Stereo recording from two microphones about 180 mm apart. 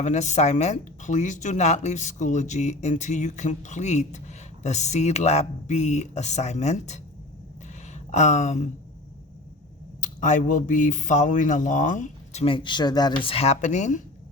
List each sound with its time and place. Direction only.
0.0 s speech: 40° left (ahead or behind)
10.0 s speech: 45° left (ahead or behind)